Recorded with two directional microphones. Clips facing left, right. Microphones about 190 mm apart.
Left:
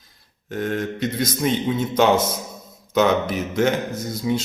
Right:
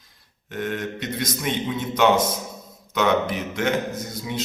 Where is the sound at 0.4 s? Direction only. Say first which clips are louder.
Left 3 dB; 35° left (ahead or behind).